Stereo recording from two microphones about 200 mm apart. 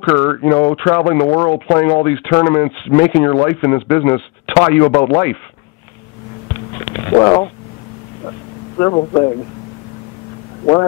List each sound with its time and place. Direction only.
0.0 s speech: 10° left (ahead or behind)
7.2 s speech: 25° left (ahead or behind)
8.7 s speech: 20° left (ahead or behind)